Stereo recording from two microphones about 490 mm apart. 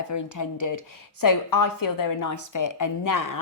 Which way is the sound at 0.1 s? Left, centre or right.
Left.